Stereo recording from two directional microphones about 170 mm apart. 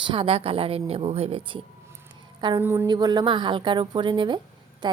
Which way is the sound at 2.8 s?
25° right (ahead or behind).